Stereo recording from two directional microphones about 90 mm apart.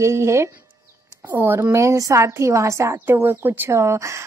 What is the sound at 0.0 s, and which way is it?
A woman's voice, 30° right (ahead or behind).